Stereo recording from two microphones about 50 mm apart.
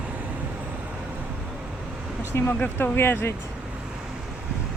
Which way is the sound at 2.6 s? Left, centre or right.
Left.